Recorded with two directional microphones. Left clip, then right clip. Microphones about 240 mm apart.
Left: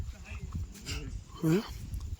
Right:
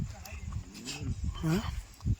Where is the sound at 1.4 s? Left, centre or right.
Centre.